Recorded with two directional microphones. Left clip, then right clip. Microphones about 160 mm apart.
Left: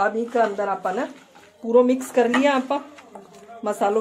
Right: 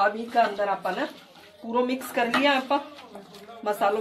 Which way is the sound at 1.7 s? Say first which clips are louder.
Left 9 dB; 90° left.